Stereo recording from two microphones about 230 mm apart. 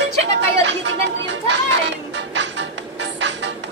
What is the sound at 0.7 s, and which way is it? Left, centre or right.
Music, right.